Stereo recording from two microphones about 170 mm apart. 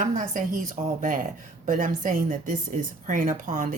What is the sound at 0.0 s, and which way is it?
Speech, 50° right (ahead or behind).